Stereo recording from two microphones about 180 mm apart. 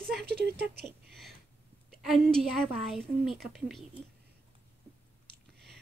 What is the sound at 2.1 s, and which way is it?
A woman's voice, centre (ahead or behind).